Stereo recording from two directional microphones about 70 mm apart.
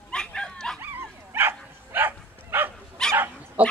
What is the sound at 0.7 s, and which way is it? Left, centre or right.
Dog, right.